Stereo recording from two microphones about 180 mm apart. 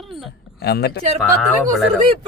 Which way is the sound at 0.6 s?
65° left (ahead or behind).